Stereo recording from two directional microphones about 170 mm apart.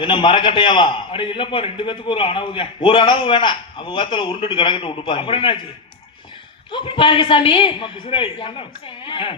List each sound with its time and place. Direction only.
0.0 s a man's voice: 30° left (ahead or behind)
6.7 s a man's voice: 30° left (ahead or behind)